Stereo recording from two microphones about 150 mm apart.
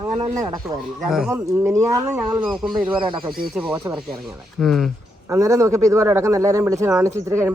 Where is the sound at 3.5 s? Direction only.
5° right (ahead or behind).